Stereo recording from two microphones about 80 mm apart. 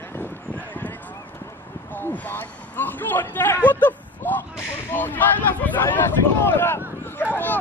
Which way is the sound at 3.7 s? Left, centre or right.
Left.